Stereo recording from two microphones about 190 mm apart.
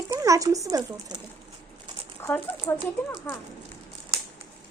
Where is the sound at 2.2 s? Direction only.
10° left (ahead or behind).